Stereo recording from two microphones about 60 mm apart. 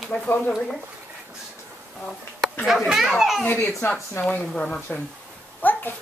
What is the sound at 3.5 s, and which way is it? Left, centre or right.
A woman's voice, left.